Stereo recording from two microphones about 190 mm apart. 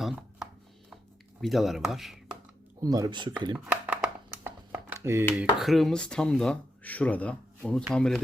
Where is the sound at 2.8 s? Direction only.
20° right (ahead or behind).